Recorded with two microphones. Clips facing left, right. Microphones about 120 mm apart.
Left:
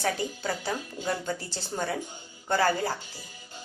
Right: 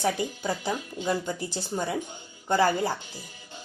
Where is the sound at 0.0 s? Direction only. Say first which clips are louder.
Right 2 dB; 15° right (ahead or behind).